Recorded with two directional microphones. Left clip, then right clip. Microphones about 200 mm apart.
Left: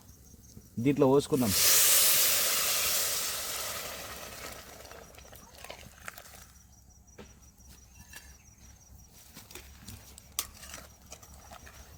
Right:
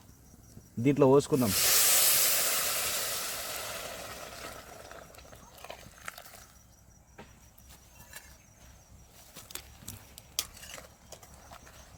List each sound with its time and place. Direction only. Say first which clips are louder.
0.8 s speech: right 2 dB; 15° right (ahead or behind)
1.3 s hiss: left 1 dB; centre (ahead or behind)
10.3 s horse: right 2 dB; centre (ahead or behind)